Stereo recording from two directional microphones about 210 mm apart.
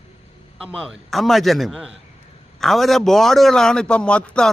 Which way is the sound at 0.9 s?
Centre (ahead or behind).